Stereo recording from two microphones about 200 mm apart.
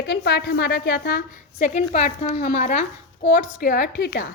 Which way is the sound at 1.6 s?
35° left (ahead or behind).